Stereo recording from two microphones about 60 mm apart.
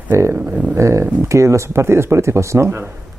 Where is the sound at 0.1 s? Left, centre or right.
Right.